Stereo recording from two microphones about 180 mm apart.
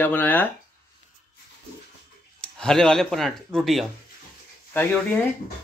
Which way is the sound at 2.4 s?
5° left (ahead or behind).